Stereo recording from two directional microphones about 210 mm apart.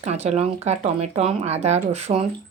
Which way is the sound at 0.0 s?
30° right (ahead or behind).